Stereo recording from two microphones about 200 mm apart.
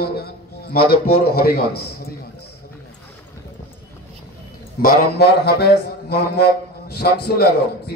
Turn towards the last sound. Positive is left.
turn(degrees=50)  # may be behind; listen again after turning